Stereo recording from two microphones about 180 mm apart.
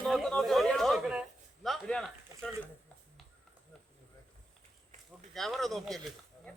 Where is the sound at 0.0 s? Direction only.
5° left (ahead or behind).